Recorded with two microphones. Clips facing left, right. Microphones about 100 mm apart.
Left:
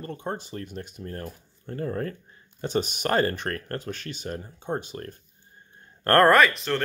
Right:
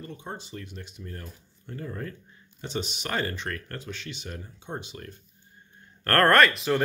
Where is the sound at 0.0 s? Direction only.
50° left (ahead or behind).